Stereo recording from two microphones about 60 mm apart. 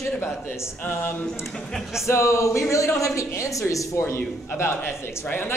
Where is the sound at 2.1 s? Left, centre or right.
Left.